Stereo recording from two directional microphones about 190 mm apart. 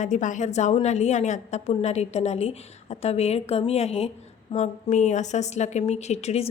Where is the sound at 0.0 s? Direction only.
40° left (ahead or behind).